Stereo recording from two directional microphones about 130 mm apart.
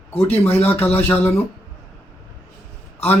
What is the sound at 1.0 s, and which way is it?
Speech, 15° left (ahead or behind).